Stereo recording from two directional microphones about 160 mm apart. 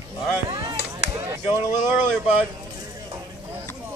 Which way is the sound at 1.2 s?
15° right (ahead or behind).